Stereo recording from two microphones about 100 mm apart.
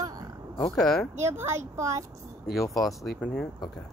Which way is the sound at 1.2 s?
25° right (ahead or behind).